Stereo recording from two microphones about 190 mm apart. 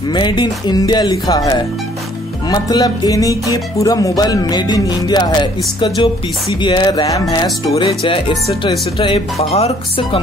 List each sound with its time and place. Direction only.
0.1 s music: 25° left (ahead or behind)